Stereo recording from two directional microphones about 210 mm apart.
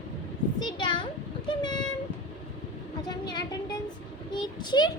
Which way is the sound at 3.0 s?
20° left (ahead or behind).